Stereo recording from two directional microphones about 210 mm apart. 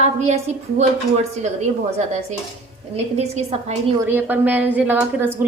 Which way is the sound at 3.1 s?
30° right (ahead or behind).